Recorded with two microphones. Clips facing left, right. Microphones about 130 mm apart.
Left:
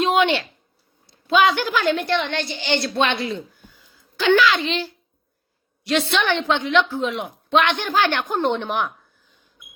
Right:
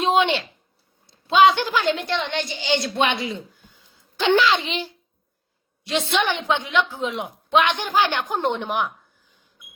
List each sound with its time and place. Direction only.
0.0 s a sound: 20° right (ahead or behind)
1.1 s a woman's voice: 25° right (ahead or behind)
4.2 s a woman's voice: 25° right (ahead or behind)
4.6 s a woman's voice: 15° right (ahead or behind)